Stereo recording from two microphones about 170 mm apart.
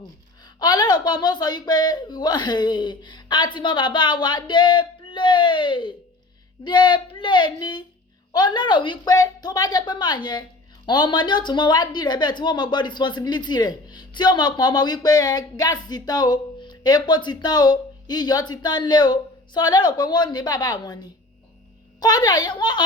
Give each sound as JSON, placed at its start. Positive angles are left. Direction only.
{"t": 0.6, "sound": "a woman's voice", "side_deg": 25}